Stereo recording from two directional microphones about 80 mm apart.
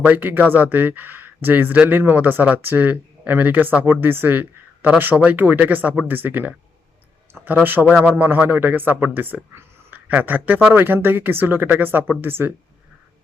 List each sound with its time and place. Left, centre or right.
0.0 s speech: right